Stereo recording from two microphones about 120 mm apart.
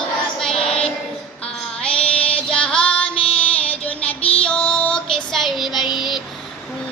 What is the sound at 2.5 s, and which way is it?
Female singing, 5° left (ahead or behind).